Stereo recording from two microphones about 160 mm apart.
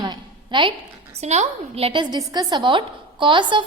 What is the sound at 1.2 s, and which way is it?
A woman's voice, 45° right (ahead or behind).